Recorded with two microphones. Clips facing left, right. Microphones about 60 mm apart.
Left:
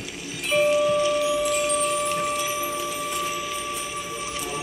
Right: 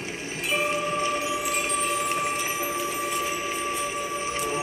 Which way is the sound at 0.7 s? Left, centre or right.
Right.